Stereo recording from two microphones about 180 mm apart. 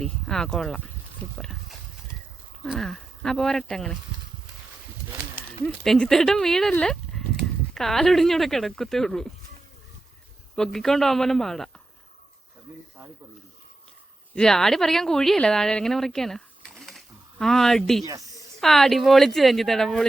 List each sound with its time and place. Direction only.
0.0 s speech: 5° left (ahead or behind)
2.6 s speech: centre (ahead or behind)
5.4 s speech: 5° left (ahead or behind)
10.5 s speech: centre (ahead or behind)
14.3 s speech: 5° left (ahead or behind)
18.0 s speech: 20° right (ahead or behind)
18.6 s speech: centre (ahead or behind)